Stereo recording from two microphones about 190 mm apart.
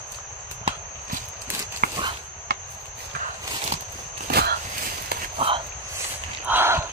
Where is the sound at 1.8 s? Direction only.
50° right (ahead or behind).